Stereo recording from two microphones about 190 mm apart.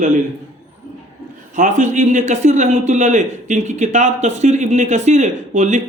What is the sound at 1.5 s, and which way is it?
A man's voice, 40° right (ahead or behind).